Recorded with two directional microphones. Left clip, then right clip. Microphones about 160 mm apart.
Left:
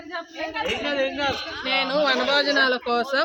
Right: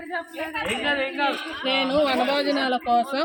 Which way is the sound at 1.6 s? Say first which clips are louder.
Even; 25° left (ahead or behind).